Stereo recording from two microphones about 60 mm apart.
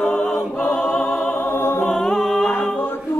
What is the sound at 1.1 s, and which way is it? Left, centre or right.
Music, centre.